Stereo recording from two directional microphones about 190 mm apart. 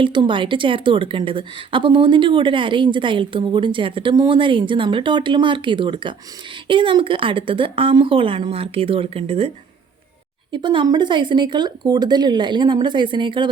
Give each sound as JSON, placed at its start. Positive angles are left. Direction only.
{"t": 0.0, "sound": "a woman's voice", "side_deg": -25}
{"t": 10.5, "sound": "a woman's voice", "side_deg": -25}